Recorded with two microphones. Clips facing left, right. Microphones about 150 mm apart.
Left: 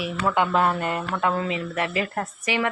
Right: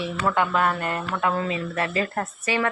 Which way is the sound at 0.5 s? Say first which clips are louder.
Left 1 dB; 20° left (ahead or behind).